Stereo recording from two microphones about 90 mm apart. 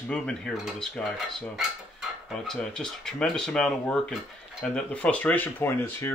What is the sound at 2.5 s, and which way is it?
Speech, 10° left (ahead or behind).